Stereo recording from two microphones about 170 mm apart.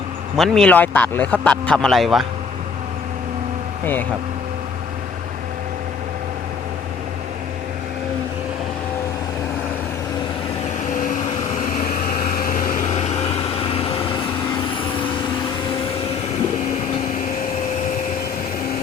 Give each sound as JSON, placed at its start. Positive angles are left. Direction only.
{"t": 0.3, "sound": "speech", "side_deg": 0}
{"t": 10.9, "sound": "vehicle", "side_deg": 50}